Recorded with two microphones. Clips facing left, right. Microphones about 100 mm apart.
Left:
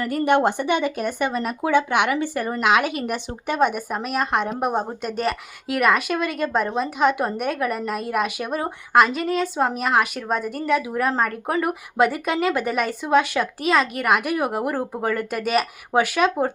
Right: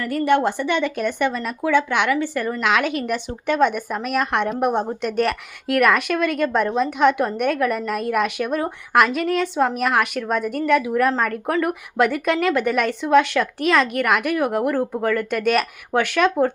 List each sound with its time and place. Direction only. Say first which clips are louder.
0.0 s speech: even; 15° left (ahead or behind)
1.0 s speech: right 2 dB; 40° left (ahead or behind)
1.7 s speech: right 1 dB; 15° left (ahead or behind)